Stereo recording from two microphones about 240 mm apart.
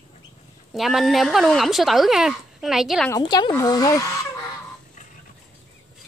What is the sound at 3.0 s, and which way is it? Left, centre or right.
Speech, centre.